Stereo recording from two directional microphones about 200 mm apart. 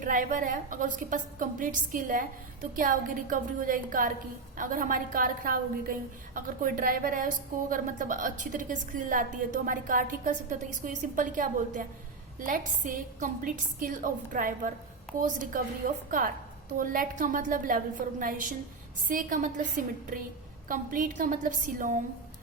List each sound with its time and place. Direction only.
0.0 s a woman's voice: 45° right (ahead or behind)